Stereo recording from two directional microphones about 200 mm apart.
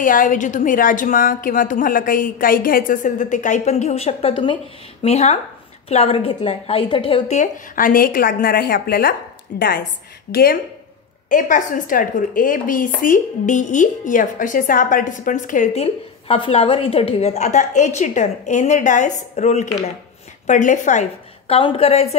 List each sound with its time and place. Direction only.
0.0 s speech: 40° left (ahead or behind)